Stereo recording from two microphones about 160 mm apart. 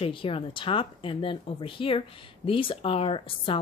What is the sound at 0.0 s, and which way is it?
Speech, 35° left (ahead or behind).